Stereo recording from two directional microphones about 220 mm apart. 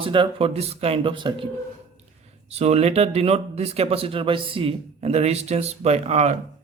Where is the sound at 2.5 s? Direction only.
30° right (ahead or behind).